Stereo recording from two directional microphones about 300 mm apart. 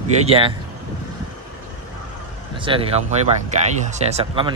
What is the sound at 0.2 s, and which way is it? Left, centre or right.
Speech, centre.